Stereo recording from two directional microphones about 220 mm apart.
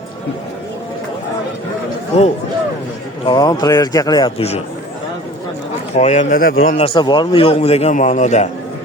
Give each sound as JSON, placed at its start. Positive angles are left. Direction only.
{"t": 3.2, "sound": "a man's voice", "side_deg": 20}
{"t": 6.0, "sound": "speech", "side_deg": 30}
{"t": 6.7, "sound": "a man's voice", "side_deg": 25}